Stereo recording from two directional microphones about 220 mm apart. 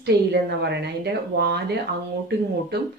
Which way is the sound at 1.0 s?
45° right (ahead or behind).